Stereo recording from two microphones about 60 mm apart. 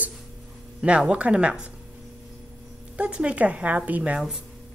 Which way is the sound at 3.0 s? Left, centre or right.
Centre.